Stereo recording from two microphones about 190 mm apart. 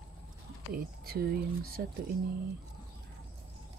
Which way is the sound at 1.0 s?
55° right (ahead or behind).